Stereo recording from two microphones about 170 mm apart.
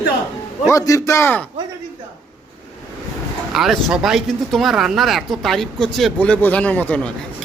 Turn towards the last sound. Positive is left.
turn(degrees=10)  # may be behind; listen again after turning